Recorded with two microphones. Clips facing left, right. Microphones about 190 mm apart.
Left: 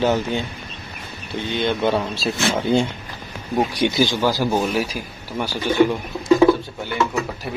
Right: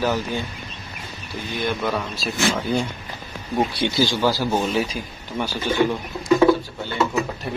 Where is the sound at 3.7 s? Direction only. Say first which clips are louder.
Left 2 dB; 15° left (ahead or behind).